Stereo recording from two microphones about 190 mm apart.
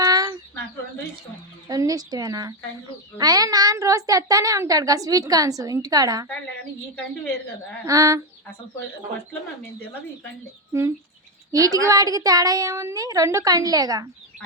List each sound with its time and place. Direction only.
0.0 s bird: 20° right (ahead or behind)
1.6 s a woman's voice: 20° right (ahead or behind)
7.9 s a sound: 15° right (ahead or behind)
10.7 s a woman's voice: 15° right (ahead or behind)